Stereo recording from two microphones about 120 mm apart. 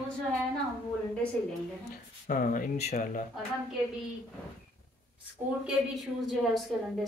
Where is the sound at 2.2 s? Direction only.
80° left.